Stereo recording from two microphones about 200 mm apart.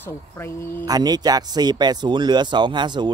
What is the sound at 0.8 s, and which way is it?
Speech, 20° right (ahead or behind).